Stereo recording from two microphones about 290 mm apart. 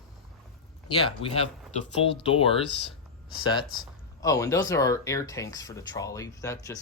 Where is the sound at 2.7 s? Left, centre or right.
Left.